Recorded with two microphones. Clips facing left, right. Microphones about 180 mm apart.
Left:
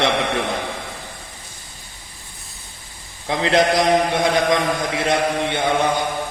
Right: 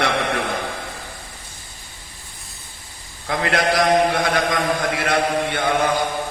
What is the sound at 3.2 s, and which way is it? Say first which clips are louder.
Speech: left 3 dB; 20° left (ahead or behind).